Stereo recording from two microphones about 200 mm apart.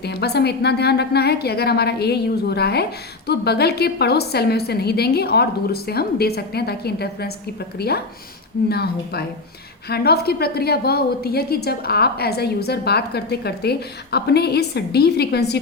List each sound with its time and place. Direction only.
0.0 s a woman's voice: 55° left (ahead or behind)